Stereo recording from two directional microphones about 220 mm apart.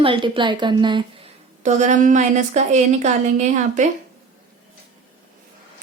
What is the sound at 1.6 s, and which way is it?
A woman's voice, 35° right (ahead or behind).